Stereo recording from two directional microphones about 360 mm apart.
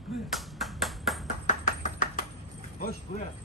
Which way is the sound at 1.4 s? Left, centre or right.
Left.